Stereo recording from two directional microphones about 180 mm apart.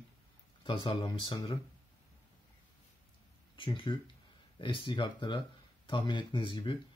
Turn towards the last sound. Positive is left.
turn(degrees=25)  # may be behind; listen again after turning